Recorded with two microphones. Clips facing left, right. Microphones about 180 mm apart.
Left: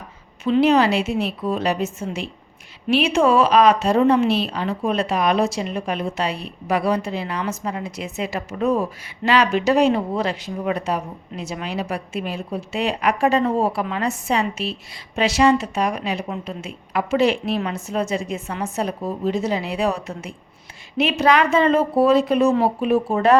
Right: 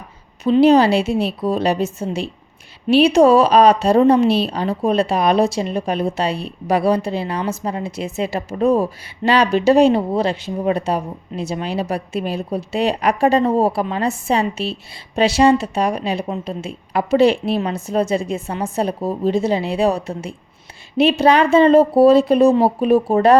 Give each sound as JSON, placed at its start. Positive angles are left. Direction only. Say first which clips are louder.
{"t": 0.5, "sound": "speech", "louder": "right 4 dB", "side_deg": -35}